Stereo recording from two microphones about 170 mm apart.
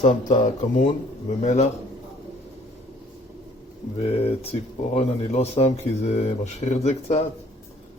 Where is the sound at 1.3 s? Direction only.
40° left (ahead or behind).